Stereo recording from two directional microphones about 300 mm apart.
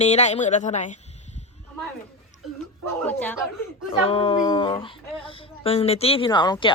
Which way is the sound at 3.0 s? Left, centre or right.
Centre.